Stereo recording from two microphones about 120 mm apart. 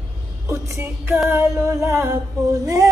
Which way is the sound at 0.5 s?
20° right (ahead or behind).